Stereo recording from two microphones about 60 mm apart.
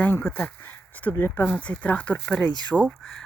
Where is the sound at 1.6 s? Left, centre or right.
Left.